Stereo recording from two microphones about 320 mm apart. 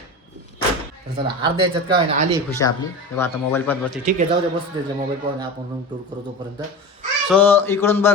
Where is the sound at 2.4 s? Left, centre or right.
Centre.